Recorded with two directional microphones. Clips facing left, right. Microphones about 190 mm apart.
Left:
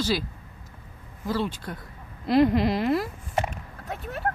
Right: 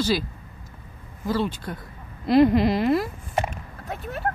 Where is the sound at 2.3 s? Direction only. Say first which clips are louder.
Right 3 dB; 15° right (ahead or behind).